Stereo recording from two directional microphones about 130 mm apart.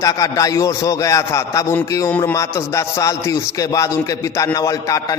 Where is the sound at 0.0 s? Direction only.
25° left (ahead or behind).